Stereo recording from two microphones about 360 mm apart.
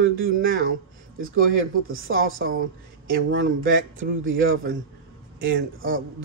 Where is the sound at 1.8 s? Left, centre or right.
Right.